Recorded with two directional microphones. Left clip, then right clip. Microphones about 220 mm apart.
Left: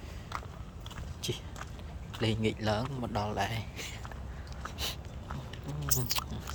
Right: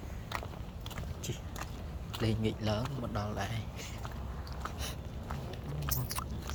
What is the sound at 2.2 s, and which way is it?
Speech, 15° left (ahead or behind).